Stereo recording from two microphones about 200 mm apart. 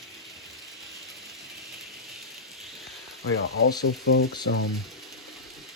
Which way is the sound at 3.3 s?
90° left.